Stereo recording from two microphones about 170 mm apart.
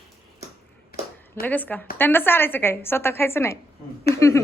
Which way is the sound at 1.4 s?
10° left (ahead or behind).